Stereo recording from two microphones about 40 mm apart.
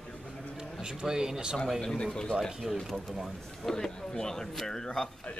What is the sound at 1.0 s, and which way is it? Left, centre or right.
Speech, centre.